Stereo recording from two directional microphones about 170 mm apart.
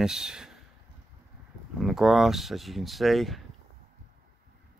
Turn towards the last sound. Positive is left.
turn(degrees=0)  # may be behind; listen again after turning